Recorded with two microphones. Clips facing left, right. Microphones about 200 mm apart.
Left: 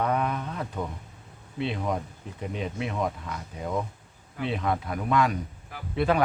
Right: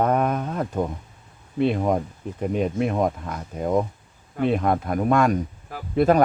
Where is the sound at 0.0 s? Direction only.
45° right (ahead or behind).